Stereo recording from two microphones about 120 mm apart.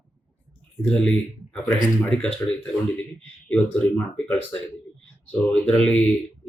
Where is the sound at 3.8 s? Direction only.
15° left (ahead or behind).